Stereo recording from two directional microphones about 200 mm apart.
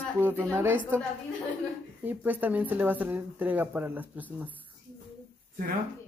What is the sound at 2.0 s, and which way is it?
Speech, 10° right (ahead or behind).